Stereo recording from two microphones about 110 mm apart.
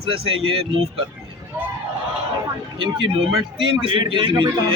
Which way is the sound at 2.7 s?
50° right (ahead or behind).